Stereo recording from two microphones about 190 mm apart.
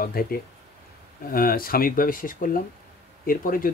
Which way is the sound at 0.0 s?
50° left (ahead or behind).